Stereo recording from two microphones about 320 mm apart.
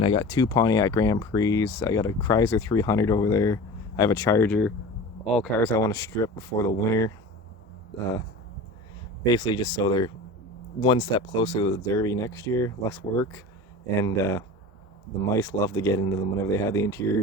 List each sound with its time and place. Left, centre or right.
0.0 s speech: centre
9.3 s speech: centre